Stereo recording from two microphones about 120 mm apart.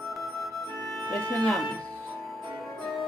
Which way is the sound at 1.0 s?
5° left (ahead or behind).